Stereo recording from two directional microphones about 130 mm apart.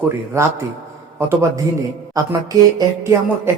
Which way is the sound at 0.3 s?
20° right (ahead or behind).